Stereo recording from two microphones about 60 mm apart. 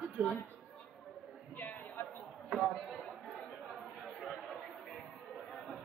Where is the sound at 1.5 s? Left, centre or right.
Left.